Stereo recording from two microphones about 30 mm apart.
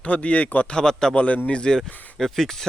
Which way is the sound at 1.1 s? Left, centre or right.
Left.